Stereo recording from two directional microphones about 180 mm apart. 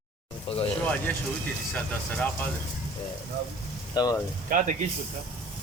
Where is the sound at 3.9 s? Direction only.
20° left (ahead or behind).